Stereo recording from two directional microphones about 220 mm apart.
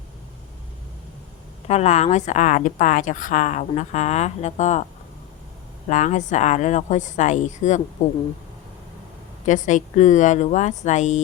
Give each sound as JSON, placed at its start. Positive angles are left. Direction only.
{"t": 1.6, "sound": "speech", "side_deg": 30}
{"t": 5.9, "sound": "speech", "side_deg": 35}
{"t": 9.5, "sound": "speech", "side_deg": 35}